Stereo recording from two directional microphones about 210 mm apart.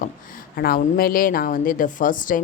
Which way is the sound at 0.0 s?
45° left (ahead or behind).